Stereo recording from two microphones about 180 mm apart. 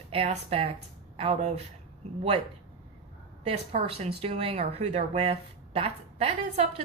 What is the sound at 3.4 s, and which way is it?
A woman's voice, 35° right (ahead or behind).